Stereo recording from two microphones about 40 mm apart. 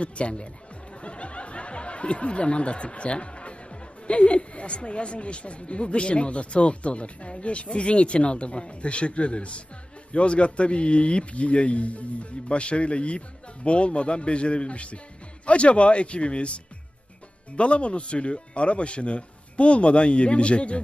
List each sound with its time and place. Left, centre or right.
0.0 s speech: left
17.6 s speech: left